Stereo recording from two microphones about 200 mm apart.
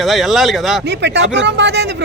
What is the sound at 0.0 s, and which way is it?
Speech, centre (ahead or behind).